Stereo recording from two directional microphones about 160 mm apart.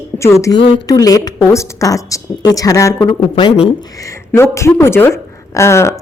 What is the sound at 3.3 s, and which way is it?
Speech, 30° left (ahead or behind).